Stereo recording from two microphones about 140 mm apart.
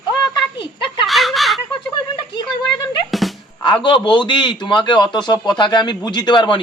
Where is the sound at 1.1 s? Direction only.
Centre (ahead or behind).